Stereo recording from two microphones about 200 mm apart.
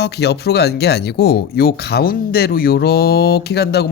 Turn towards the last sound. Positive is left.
turn(degrees=55)  # may be behind; listen again after turning